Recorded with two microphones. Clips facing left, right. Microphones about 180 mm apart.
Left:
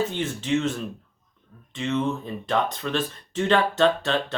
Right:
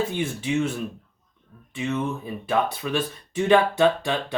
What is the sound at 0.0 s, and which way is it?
Speech, 10° right (ahead or behind).